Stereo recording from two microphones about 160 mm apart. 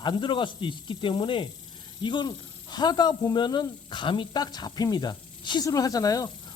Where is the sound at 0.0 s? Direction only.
30° left (ahead or behind).